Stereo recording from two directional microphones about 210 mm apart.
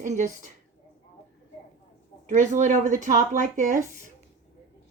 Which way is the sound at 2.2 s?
35° right (ahead or behind).